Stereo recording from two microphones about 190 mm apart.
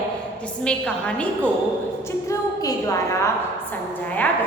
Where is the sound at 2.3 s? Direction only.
20° left (ahead or behind).